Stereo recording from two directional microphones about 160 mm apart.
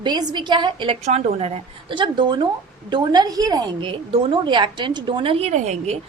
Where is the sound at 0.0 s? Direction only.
25° right (ahead or behind).